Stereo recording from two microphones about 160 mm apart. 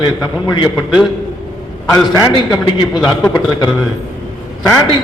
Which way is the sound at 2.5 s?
25° left (ahead or behind).